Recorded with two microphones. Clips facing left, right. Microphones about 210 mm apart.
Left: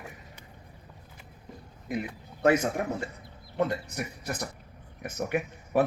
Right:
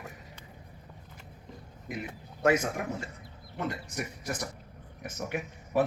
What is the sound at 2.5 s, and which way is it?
A man's voice, 60° left (ahead or behind).